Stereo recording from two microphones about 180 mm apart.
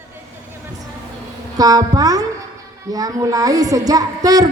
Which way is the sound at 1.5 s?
20° right (ahead or behind).